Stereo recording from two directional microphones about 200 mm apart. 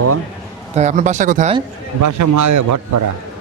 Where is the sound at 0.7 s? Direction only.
35° right (ahead or behind).